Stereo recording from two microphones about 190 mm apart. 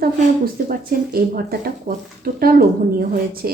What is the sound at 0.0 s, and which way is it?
A woman's voice, 50° right (ahead or behind).